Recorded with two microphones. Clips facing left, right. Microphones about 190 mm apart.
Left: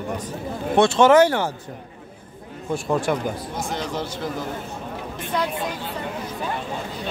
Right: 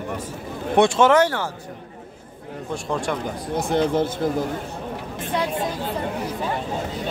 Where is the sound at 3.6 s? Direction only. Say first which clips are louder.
Right 11 dB; 60° right (ahead or behind).